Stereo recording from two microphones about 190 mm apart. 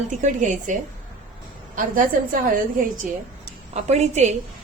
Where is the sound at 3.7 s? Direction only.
35° right (ahead or behind).